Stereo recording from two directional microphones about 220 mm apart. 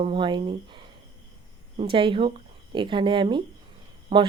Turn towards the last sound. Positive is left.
turn(degrees=-20)  # may be behind; listen again after turning